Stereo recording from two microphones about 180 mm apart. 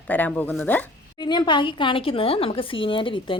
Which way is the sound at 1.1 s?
25° left (ahead or behind).